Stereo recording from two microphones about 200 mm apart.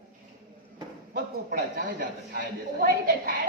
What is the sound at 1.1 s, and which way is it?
A man's voice, 50° right (ahead or behind).